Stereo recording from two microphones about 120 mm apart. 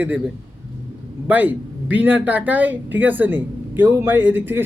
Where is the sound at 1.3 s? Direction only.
15° right (ahead or behind).